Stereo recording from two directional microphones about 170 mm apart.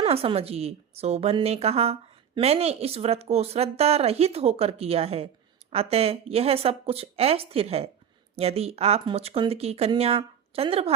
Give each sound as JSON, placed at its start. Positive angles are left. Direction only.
{"t": 0.0, "sound": "a woman's voice", "side_deg": -35}